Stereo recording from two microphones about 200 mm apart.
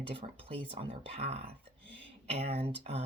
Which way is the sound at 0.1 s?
25° right (ahead or behind).